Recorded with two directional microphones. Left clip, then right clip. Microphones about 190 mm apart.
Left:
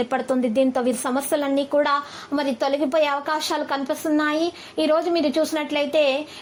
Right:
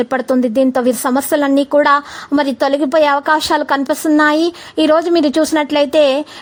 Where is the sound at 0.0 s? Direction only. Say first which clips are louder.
Right 7 dB; 40° right (ahead or behind).